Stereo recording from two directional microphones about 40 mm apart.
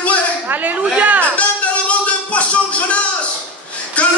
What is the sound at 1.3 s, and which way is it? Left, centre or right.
Music, left.